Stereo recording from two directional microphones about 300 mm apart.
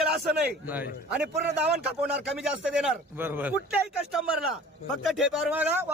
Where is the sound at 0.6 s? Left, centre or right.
Centre.